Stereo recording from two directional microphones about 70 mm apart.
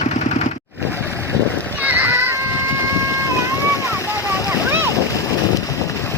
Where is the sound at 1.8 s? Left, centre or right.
Right.